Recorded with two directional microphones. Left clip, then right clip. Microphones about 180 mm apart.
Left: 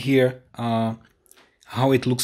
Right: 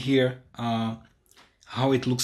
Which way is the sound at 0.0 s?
45° left (ahead or behind).